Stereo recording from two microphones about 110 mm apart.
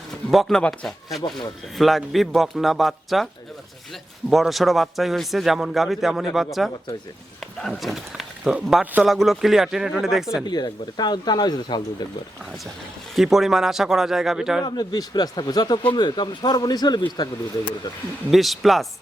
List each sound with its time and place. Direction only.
0.1 s a man's voice: centre (ahead or behind)
4.3 s a man's voice: centre (ahead or behind)
7.7 s a man's voice: centre (ahead or behind)
9.0 s a man's voice: centre (ahead or behind)
10.4 s speech: 40° left (ahead or behind)
13.1 s a man's voice: centre (ahead or behind)
14.6 s speech: 35° left (ahead or behind)
18.3 s a man's voice: centre (ahead or behind)